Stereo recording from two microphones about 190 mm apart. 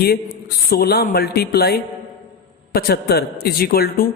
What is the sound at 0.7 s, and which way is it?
A man's voice, 55° left (ahead or behind).